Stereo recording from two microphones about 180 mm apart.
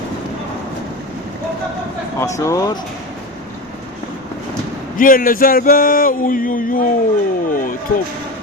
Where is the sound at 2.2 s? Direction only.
15° left (ahead or behind).